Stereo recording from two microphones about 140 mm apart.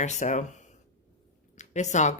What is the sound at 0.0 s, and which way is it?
Speech, 55° left (ahead or behind).